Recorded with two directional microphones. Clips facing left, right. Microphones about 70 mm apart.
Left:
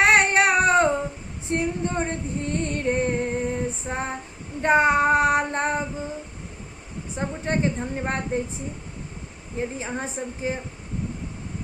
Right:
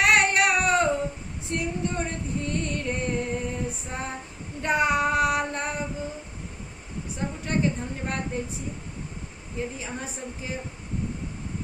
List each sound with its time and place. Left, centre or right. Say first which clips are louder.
0.0 s a sound: left 3 dB; left
1.5 s female singing: left 4 dB; left
7.2 s a woman's voice: left 2 dB; left
9.6 s a woman's voice: left 4 dB; left